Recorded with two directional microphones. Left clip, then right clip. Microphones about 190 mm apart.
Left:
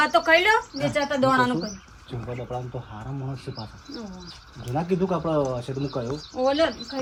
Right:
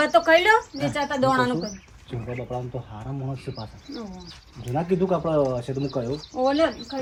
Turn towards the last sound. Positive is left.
turn(degrees=0)  # may be behind; listen again after turning